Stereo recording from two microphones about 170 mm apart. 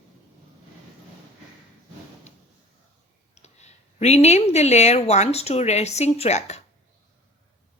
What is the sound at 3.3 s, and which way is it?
Speech, 40° left (ahead or behind).